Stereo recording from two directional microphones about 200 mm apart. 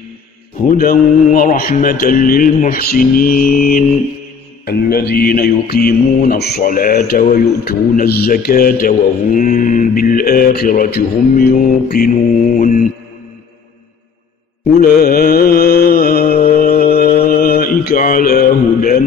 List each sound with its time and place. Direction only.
0.7 s mantra: 45° left (ahead or behind)
14.8 s mantra: 45° left (ahead or behind)